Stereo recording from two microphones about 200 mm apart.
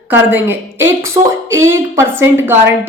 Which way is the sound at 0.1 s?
10° right (ahead or behind).